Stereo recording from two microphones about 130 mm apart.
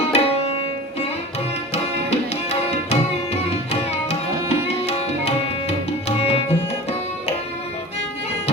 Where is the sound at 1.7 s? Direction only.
55° left (ahead or behind).